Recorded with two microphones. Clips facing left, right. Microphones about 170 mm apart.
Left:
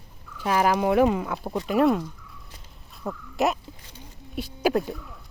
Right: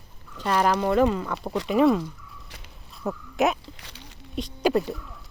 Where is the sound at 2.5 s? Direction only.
75° right (ahead or behind).